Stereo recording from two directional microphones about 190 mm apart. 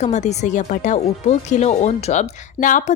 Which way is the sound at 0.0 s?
35° left (ahead or behind).